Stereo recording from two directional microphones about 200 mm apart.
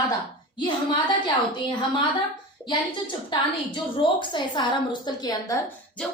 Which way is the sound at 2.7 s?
25° left (ahead or behind).